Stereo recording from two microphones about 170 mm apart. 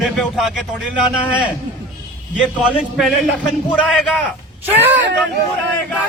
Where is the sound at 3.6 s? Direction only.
5° left (ahead or behind).